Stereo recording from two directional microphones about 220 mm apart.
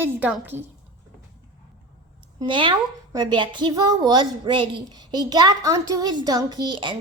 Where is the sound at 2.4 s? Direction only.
20° right (ahead or behind).